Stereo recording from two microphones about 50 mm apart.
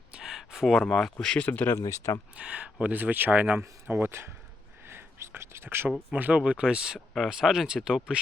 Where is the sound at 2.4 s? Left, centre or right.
Right.